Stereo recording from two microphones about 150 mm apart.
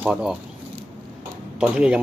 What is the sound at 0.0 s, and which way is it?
Speech, 5° right (ahead or behind).